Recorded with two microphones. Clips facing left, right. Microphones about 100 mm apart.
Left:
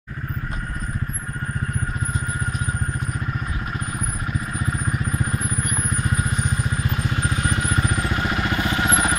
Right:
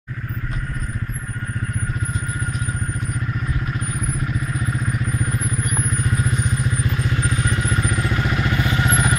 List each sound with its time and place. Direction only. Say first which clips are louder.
7.2 s vehicle: right 1 dB; 25° left (ahead or behind)